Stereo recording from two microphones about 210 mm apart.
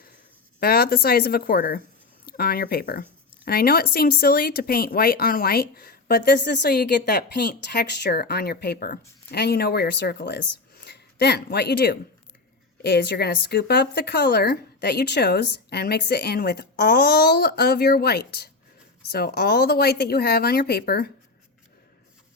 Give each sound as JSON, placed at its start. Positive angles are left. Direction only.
{"t": 0.6, "sound": "a woman's voice", "side_deg": 45}